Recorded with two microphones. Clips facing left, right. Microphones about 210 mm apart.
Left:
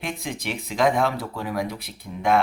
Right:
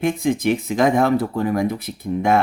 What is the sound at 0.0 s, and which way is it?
Speech, 45° right (ahead or behind).